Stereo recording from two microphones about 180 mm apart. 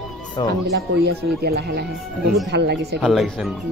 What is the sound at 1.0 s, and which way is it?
Speech, 65° right (ahead or behind).